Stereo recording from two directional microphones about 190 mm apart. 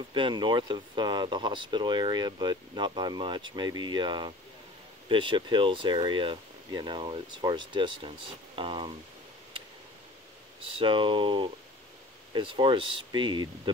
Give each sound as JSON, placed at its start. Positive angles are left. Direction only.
{"t": 0.1, "sound": "speech", "side_deg": -25}
{"t": 10.6, "sound": "speech", "side_deg": -25}